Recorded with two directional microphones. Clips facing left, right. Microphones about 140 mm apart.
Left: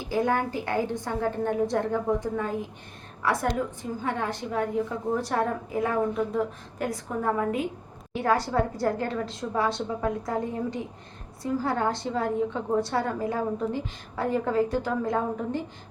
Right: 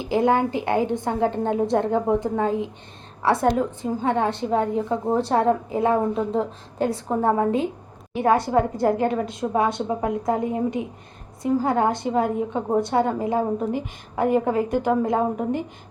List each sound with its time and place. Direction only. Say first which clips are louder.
0.0 s a woman's voice: right 6 dB; 20° right (ahead or behind)